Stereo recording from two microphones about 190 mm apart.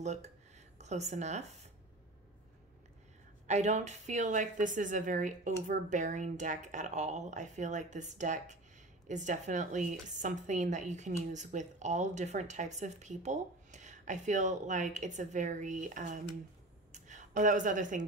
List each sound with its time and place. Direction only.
0.0 s speech: 35° right (ahead or behind)
3.4 s a woman's voice: 40° right (ahead or behind)